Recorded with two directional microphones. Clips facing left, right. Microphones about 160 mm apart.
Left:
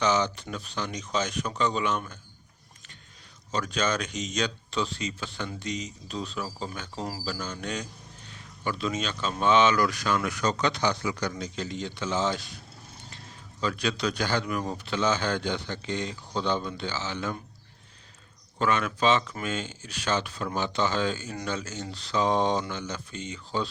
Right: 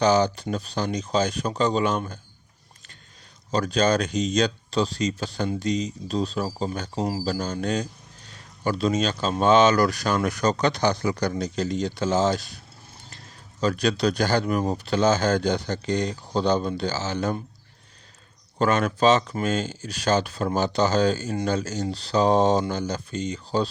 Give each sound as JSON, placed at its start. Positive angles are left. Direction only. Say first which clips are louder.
{"t": 0.0, "sound": "speech", "louder": "right 6 dB", "side_deg": -35}
{"t": 3.5, "sound": "speech", "louder": "right 7 dB", "side_deg": -35}
{"t": 13.6, "sound": "speech", "louder": "right 6 dB", "side_deg": -40}
{"t": 18.6, "sound": "speech", "louder": "right 5 dB", "side_deg": -40}